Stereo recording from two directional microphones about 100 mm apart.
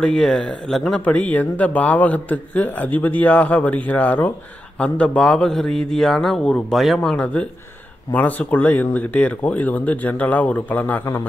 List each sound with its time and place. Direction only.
0.0 s a man's voice: 5° left (ahead or behind)
1.0 s a man's voice: 15° left (ahead or behind)